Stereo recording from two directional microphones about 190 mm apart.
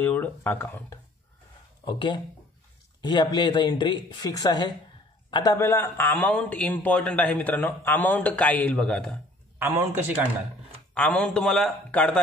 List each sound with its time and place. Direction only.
0.0 s speech: 10° left (ahead or behind)
1.9 s speech: 25° left (ahead or behind); by 9.2 s 5° left (ahead or behind)
9.6 s a man's voice: 10° right (ahead or behind)
11.0 s a man's voice: 5° left (ahead or behind)